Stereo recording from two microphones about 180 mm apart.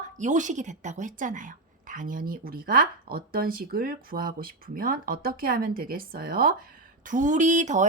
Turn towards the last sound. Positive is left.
turn(degrees=-40)  # may be behind; listen again after turning